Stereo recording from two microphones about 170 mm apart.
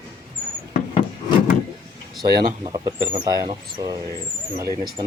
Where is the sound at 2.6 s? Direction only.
25° right (ahead or behind).